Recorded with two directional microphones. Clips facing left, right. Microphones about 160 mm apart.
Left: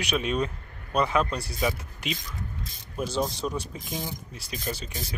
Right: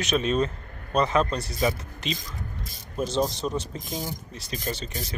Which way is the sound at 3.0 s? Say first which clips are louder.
Right 3 dB; 25° right (ahead or behind).